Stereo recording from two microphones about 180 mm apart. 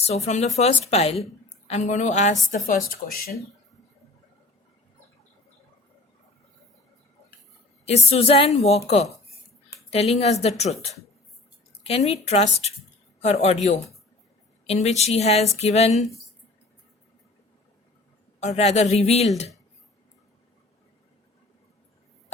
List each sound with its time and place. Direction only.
0.0 s a woman's voice: 35° left (ahead or behind)
2.5 s speech: 50° left (ahead or behind)
7.9 s a woman's voice: 35° left (ahead or behind)
11.8 s a woman's voice: 35° left (ahead or behind)
18.3 s a woman's voice: 35° left (ahead or behind)